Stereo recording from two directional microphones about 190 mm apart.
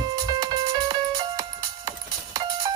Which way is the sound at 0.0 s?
20° right (ahead or behind).